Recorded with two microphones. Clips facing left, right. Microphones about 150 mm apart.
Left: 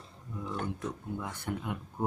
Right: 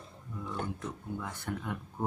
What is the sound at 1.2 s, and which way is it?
Speech, 15° left (ahead or behind).